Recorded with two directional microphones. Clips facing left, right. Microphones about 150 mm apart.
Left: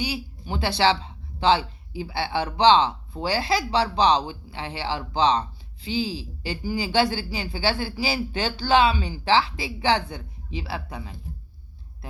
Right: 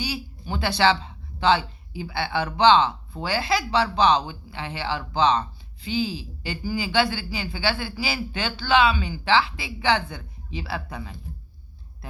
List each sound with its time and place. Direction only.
0.0 s speech: 25° left (ahead or behind)